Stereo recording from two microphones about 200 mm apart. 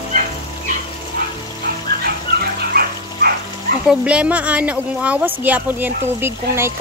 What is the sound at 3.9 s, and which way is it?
Speech, 5° right (ahead or behind).